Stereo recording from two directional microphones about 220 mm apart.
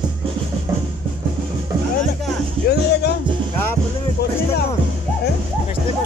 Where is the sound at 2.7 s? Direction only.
50° left (ahead or behind).